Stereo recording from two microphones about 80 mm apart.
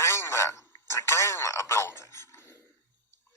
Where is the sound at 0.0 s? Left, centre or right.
Left.